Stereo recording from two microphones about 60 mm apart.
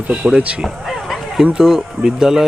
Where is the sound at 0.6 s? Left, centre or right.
Centre.